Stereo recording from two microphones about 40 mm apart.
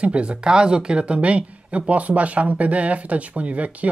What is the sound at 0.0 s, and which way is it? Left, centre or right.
Speech, right.